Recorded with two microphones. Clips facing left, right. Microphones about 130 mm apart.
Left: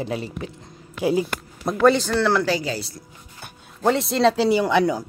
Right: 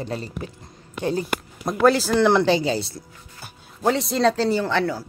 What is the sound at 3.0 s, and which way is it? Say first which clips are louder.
Speech: even; 5° right (ahead or behind).